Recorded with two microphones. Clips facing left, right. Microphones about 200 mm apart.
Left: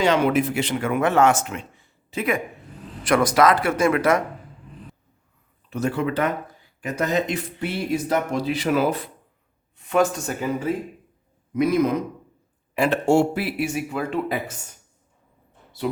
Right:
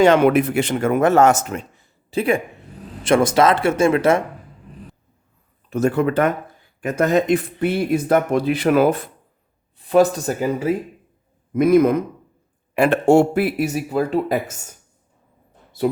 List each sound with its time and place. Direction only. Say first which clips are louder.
0.0 s speech: right 6 dB; 55° right (ahead or behind); by 4.2 s 25° right (ahead or behind)
5.7 s speech: right 6 dB; 50° right (ahead or behind)
9.7 s speech: right 5 dB; 35° right (ahead or behind)
11.5 s speech: right 6 dB; 50° right (ahead or behind)